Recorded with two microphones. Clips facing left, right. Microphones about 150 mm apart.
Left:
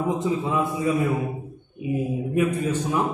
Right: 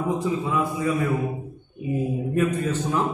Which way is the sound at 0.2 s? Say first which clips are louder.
Left 1 dB; 20° left (ahead or behind).